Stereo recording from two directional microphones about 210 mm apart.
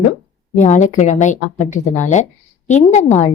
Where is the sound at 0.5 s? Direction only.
35° left (ahead or behind).